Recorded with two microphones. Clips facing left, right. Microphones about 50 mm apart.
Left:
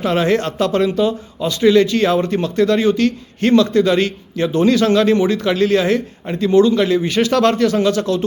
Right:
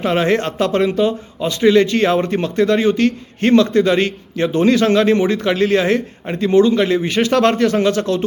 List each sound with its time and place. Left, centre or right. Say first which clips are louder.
0.0 s a man's voice: even; right